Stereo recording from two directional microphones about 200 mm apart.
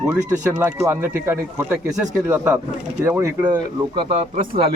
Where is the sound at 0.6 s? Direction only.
10° right (ahead or behind).